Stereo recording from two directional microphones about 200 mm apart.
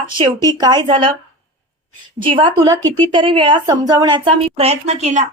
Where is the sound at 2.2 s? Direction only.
25° right (ahead or behind).